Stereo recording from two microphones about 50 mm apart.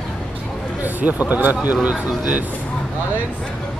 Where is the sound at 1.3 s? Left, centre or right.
Right.